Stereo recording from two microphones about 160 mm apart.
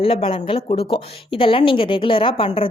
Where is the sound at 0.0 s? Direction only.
35° left (ahead or behind).